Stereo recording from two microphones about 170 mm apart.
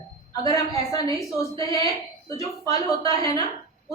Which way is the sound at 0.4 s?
20° left (ahead or behind).